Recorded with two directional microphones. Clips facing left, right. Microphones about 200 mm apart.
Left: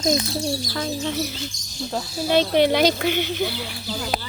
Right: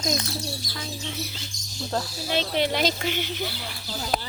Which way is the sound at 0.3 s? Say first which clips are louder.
Left 8 dB; 50° left (ahead or behind).